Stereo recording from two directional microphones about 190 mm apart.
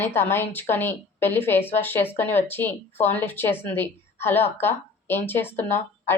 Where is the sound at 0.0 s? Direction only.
10° left (ahead or behind).